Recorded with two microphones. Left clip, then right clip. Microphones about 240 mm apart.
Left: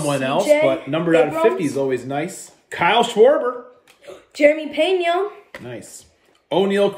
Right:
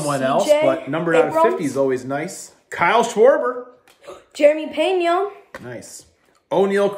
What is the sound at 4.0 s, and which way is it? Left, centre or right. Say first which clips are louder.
Speech: even; centre.